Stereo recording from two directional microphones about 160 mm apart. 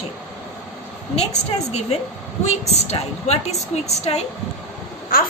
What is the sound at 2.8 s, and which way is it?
A woman's voice, 40° left (ahead or behind).